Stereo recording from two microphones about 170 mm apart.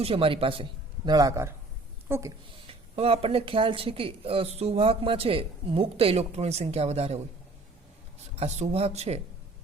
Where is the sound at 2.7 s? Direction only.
35° right (ahead or behind).